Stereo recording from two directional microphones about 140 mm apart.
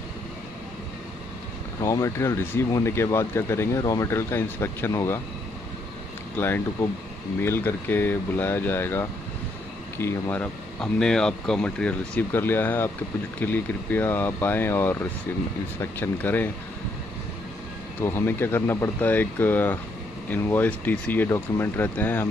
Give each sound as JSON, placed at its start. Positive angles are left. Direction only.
{"t": 1.8, "sound": "speech", "side_deg": 20}
{"t": 6.3, "sound": "speech", "side_deg": 15}
{"t": 18.0, "sound": "speech", "side_deg": 15}